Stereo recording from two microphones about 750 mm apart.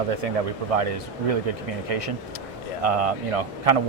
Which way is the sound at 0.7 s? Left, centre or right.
Right.